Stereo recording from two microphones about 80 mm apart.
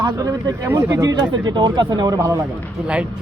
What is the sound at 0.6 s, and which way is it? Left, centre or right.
Speech, right.